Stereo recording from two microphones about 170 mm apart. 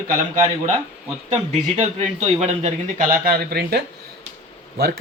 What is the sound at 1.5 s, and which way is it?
A man's voice, 45° right (ahead or behind).